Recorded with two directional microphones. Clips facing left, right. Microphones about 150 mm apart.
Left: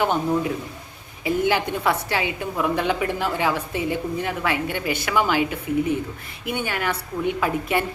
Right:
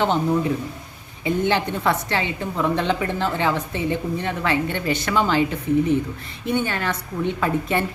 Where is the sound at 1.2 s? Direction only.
10° left (ahead or behind).